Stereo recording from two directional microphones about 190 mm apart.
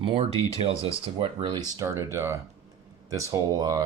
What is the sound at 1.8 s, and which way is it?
Speech, 15° right (ahead or behind).